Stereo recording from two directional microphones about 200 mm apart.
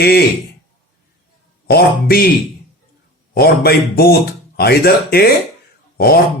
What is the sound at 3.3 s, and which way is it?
Speech, 50° left (ahead or behind).